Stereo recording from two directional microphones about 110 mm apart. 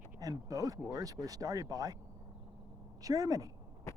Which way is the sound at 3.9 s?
25° left (ahead or behind).